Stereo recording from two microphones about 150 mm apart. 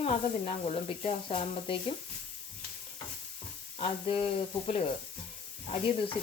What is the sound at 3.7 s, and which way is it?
Speech, 40° left (ahead or behind).